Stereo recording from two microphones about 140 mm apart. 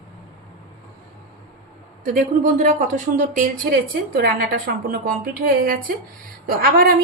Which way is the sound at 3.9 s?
85° right.